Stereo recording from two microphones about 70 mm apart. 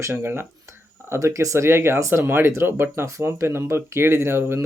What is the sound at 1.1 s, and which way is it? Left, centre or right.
Speech, right.